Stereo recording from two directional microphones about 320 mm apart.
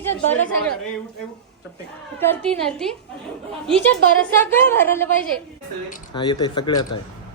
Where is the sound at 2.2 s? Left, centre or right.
Centre.